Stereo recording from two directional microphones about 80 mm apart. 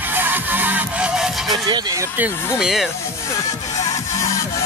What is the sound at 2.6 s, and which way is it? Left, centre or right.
Speech, centre.